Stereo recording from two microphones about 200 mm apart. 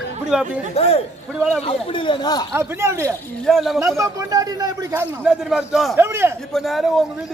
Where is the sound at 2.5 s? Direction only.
15° right (ahead or behind).